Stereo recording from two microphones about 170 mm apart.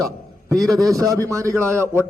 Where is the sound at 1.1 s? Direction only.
15° right (ahead or behind).